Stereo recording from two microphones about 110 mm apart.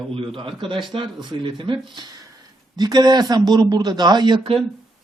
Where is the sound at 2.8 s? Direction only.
40° right (ahead or behind).